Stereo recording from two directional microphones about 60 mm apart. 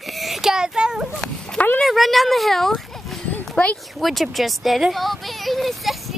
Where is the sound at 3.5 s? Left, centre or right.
Left.